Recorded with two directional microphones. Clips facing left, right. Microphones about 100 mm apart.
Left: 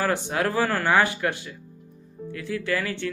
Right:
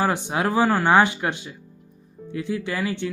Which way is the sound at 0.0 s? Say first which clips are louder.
Right 2 dB; 20° right (ahead or behind).